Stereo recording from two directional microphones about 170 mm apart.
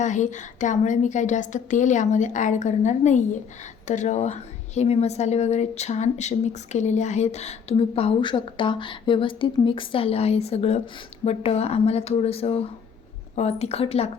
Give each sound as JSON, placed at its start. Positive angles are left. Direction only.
{"t": 0.0, "sound": "a woman's voice", "side_deg": 45}